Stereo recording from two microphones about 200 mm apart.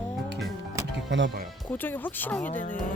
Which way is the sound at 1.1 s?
65° right (ahead or behind).